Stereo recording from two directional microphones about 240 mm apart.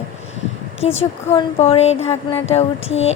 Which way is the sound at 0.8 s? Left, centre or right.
Left.